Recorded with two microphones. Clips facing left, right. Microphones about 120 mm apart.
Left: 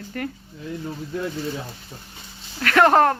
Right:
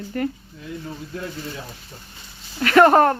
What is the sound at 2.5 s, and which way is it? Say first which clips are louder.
Speech: right 3 dB; 5° right (ahead or behind).